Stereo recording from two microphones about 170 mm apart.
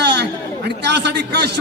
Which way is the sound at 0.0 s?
80° right.